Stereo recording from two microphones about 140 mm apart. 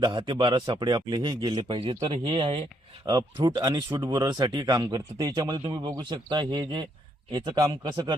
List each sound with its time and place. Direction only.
0.0 s speech: 35° right (ahead or behind)